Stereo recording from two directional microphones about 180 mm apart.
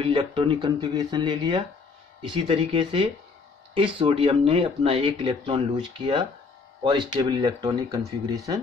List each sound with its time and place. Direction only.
0.0 s speech: 25° right (ahead or behind)